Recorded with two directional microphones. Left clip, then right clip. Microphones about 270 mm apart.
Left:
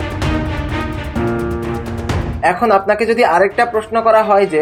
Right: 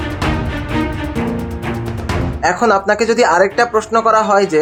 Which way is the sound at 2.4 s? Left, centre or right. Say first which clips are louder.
Left 1 dB; centre.